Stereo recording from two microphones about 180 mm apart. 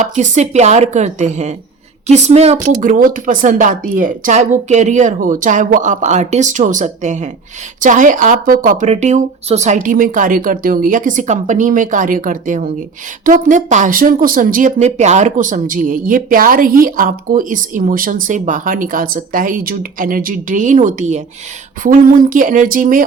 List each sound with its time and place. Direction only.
0.0 s a woman's voice: 40° right (ahead or behind)